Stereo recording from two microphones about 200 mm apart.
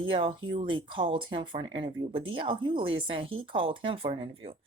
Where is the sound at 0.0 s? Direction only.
25° right (ahead or behind).